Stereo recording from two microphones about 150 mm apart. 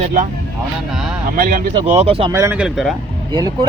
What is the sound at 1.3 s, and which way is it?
Speech, 80° right.